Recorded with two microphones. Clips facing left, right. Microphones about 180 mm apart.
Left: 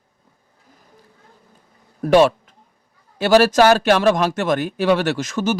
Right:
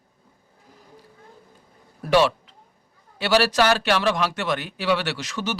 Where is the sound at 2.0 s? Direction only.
50° left (ahead or behind).